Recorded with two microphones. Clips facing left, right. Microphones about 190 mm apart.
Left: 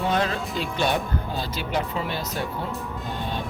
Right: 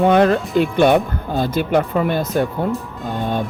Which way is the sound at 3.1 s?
50° right (ahead or behind).